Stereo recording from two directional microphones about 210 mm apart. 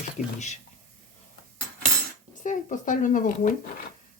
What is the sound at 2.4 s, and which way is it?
Speech, 35° left (ahead or behind).